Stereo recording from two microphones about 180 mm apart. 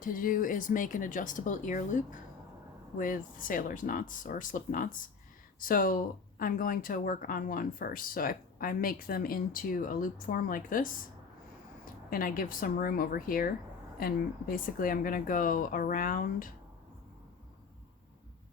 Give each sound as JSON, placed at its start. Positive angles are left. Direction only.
{"t": 0.0, "sound": "speech", "side_deg": 50}
{"t": 12.1, "sound": "speech", "side_deg": 50}